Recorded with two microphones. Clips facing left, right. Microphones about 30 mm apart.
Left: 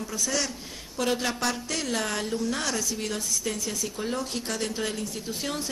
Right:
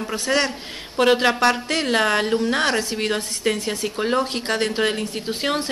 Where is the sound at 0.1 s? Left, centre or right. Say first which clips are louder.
Right 9 dB; right.